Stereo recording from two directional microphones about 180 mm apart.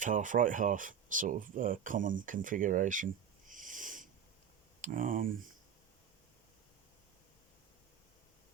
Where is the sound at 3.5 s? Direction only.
45° right (ahead or behind).